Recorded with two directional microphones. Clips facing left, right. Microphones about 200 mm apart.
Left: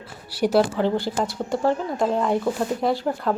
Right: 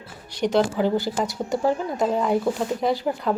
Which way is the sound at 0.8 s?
5° right (ahead or behind).